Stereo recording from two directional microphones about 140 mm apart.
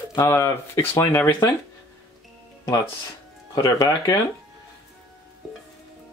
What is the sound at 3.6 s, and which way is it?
Speech, 25° left (ahead or behind).